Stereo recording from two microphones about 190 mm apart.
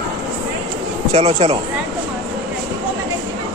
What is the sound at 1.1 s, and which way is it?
Speech, 35° right (ahead or behind).